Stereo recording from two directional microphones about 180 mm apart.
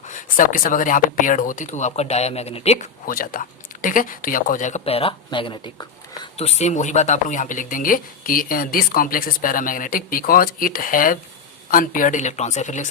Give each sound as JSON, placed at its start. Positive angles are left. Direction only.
{"t": 0.1, "sound": "speech", "side_deg": 45}
{"t": 6.4, "sound": "speech", "side_deg": 35}